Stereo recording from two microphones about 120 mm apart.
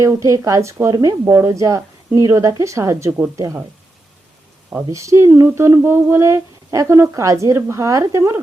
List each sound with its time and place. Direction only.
0.0 s speech: 25° right (ahead or behind)
4.9 s speech: 25° right (ahead or behind)